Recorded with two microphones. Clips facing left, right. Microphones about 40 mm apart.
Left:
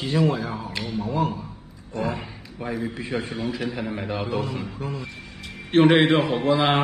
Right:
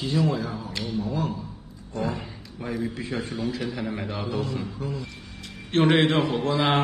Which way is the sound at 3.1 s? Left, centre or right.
Left.